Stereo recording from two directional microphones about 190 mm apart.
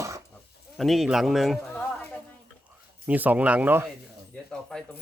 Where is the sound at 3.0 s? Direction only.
10° right (ahead or behind).